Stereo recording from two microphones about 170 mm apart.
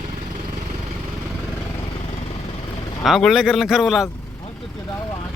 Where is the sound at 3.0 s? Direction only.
Centre (ahead or behind).